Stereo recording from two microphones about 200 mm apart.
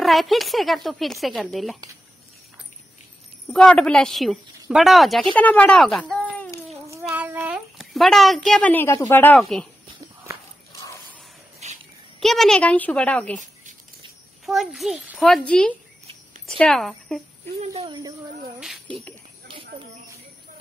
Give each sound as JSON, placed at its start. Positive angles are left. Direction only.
{"t": 0.0, "sound": "speech", "side_deg": 0}
{"t": 3.4, "sound": "speech", "side_deg": 5}
{"t": 7.1, "sound": "a child's voice", "side_deg": -10}
{"t": 10.7, "sound": "a sound", "side_deg": 15}
{"t": 11.6, "sound": "a sound", "side_deg": -35}
{"t": 12.2, "sound": "a woman's voice", "side_deg": 0}
{"t": 14.4, "sound": "speech", "side_deg": 0}
{"t": 17.7, "sound": "speech", "side_deg": -25}
{"t": 19.4, "sound": "a sound", "side_deg": -25}